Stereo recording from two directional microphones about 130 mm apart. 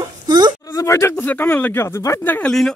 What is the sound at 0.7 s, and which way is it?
Speech, 20° left (ahead or behind).